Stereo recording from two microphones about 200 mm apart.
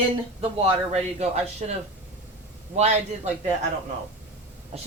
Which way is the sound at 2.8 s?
35° right (ahead or behind).